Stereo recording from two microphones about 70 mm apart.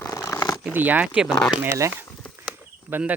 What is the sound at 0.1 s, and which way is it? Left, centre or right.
Purr, left.